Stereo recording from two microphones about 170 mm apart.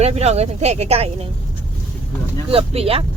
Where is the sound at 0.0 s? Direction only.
40° right (ahead or behind).